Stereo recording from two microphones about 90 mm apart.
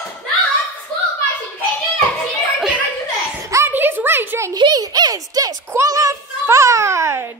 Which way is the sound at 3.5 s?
25° right (ahead or behind).